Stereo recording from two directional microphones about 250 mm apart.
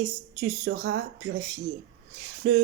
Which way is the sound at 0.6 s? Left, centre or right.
Right.